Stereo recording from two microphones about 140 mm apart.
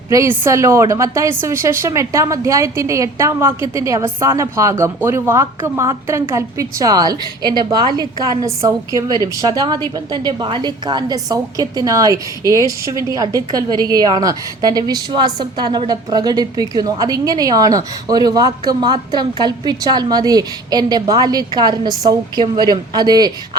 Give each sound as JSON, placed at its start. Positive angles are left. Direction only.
{"t": 0.1, "sound": "a woman's voice", "side_deg": -20}